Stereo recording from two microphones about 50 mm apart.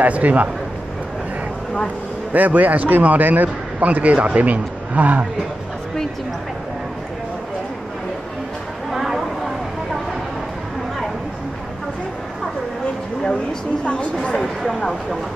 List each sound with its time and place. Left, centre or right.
0.0 s speech: right
2.3 s a man's voice: right
8.9 s a sound: centre
13.2 s a sound: centre
13.8 s a woman's voice: left
14.4 s speech: centre